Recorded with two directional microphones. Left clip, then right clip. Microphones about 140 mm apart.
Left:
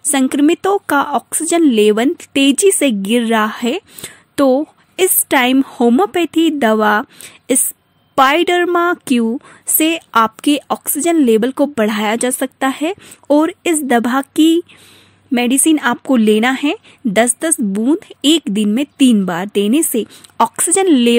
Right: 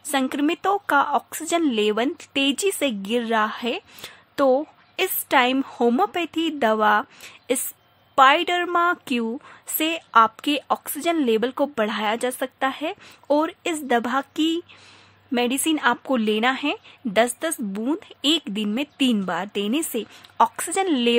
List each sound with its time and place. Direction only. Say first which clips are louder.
0.1 s a woman's voice: left 9 dB; 40° left (ahead or behind)